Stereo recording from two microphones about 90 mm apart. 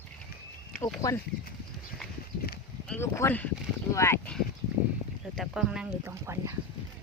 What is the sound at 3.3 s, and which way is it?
Speech, 20° left (ahead or behind).